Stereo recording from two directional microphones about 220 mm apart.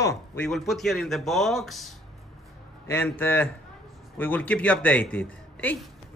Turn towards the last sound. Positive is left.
turn(degrees=5)  # may be behind; listen again after turning